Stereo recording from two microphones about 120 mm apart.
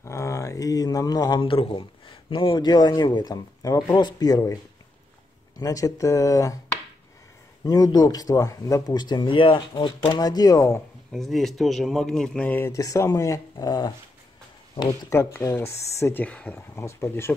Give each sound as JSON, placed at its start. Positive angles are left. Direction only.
{"t": 0.0, "sound": "a man's voice", "side_deg": 25}
{"t": 5.6, "sound": "speech", "side_deg": 30}
{"t": 7.6, "sound": "speech", "side_deg": 30}
{"t": 11.1, "sound": "speech", "side_deg": 0}
{"t": 12.7, "sound": "speech", "side_deg": 30}
{"t": 14.9, "sound": "speech", "side_deg": 20}
{"t": 16.5, "sound": "speech", "side_deg": 20}